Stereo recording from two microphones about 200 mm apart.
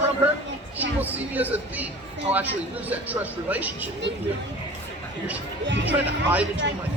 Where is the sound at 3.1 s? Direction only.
10° right (ahead or behind).